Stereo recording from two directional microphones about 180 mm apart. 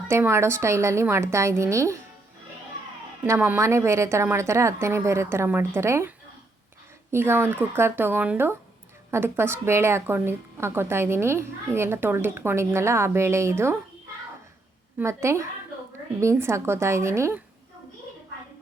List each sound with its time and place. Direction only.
0.1 s a woman's voice: 15° right (ahead or behind)
3.2 s a woman's voice: 15° right (ahead or behind)
14.9 s a woman's voice: 15° right (ahead or behind)